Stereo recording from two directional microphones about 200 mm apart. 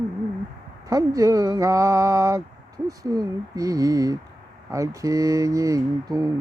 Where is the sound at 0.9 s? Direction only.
15° right (ahead or behind).